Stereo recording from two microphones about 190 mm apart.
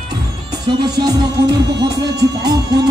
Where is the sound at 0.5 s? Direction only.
20° right (ahead or behind).